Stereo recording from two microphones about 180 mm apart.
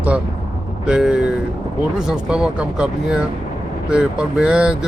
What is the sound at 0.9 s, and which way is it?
Speech, 5° right (ahead or behind).